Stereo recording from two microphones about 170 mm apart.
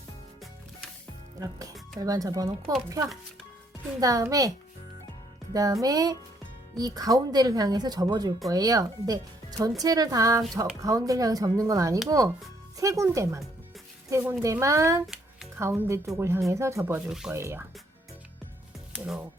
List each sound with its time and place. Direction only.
1.4 s speech: 20° right (ahead or behind)
4.0 s speech: 20° right (ahead or behind)
5.8 s speech: 20° right (ahead or behind)
15.0 s music: centre (ahead or behind)
15.5 s speech: 15° right (ahead or behind)
17.1 s speech: 5° right (ahead or behind)
17.3 s speech: 15° right (ahead or behind)
18.9 s speech: 5° right (ahead or behind)